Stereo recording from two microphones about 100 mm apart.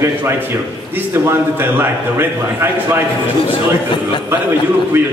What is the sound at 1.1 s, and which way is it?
A man's voice, 20° right (ahead or behind).